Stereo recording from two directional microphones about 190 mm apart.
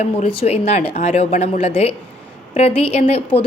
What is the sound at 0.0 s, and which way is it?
A woman's voice, 35° left (ahead or behind).